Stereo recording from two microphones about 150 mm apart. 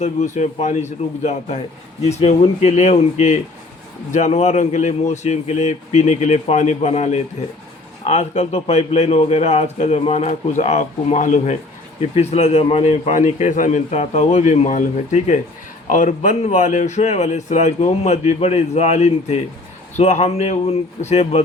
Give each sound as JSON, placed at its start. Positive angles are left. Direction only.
{"t": 0.3, "sound": "a man's voice", "side_deg": 55}